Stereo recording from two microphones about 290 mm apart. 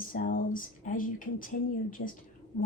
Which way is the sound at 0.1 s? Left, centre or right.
Left.